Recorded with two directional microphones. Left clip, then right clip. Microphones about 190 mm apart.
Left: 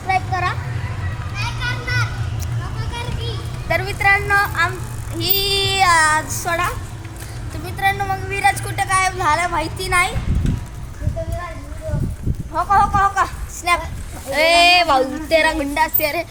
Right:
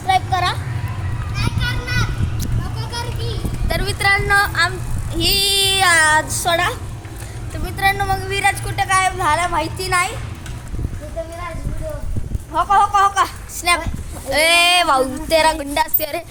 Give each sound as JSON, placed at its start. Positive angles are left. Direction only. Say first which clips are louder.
{"t": 0.1, "sound": "a sound", "louder": "right 3 dB", "side_deg": -15}
{"t": 3.7, "sound": "vehicle", "louder": "left 1 dB", "side_deg": -5}
{"t": 5.2, "sound": "child singing", "louder": "right 3 dB", "side_deg": -65}
{"t": 5.7, "sound": "speech", "louder": "even", "side_deg": 0}
{"t": 8.6, "sound": "speech", "louder": "right 1 dB", "side_deg": 20}
{"t": 8.9, "sound": "speech", "louder": "right 1 dB", "side_deg": 5}
{"t": 12.5, "sound": "a woman's voice", "louder": "right 1 dB", "side_deg": 0}
{"t": 14.3, "sound": "speech", "louder": "even", "side_deg": -20}
{"t": 14.5, "sound": "speech", "louder": "left 2 dB", "side_deg": -30}